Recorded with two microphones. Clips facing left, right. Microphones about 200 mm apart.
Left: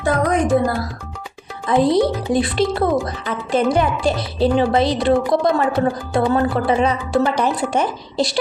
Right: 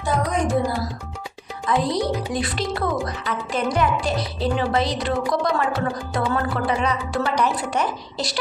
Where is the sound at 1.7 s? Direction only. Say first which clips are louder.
Left 6 dB; 25° left (ahead or behind).